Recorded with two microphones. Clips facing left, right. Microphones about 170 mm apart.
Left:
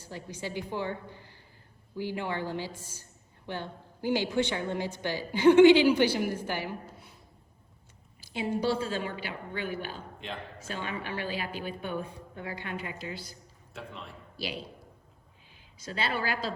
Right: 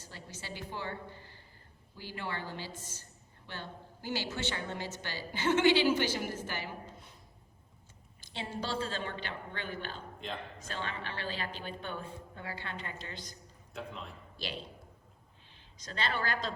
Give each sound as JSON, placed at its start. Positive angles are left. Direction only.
{"t": 0.0, "sound": "a woman's voice", "side_deg": 15}
{"t": 8.2, "sound": "a woman's voice", "side_deg": 10}
{"t": 15.5, "sound": "speech", "side_deg": 10}